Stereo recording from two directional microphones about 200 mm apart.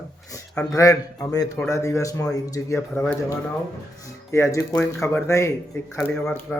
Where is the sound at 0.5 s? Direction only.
5° left (ahead or behind).